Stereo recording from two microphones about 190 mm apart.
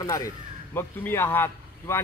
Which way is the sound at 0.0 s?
20° left (ahead or behind).